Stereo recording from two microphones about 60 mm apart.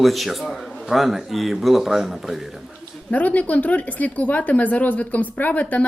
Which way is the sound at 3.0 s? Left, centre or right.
Left.